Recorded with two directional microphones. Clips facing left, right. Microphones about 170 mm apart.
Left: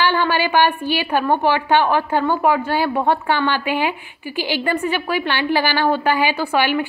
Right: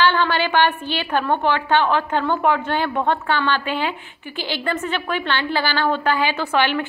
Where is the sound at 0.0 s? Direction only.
10° left (ahead or behind).